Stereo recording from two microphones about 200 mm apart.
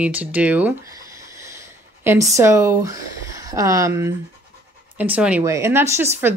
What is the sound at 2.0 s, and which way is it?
Speech, 15° right (ahead or behind).